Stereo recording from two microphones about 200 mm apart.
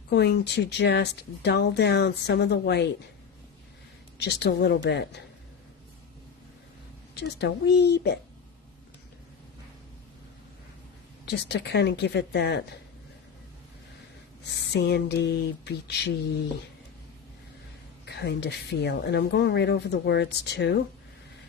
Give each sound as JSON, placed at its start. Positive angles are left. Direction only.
{"t": 0.1, "sound": "speech", "side_deg": 55}
{"t": 4.2, "sound": "speech", "side_deg": 55}
{"t": 7.1, "sound": "speech", "side_deg": 55}
{"t": 11.3, "sound": "speech", "side_deg": 60}
{"t": 14.7, "sound": "speech", "side_deg": 55}
{"t": 18.0, "sound": "speech", "side_deg": 55}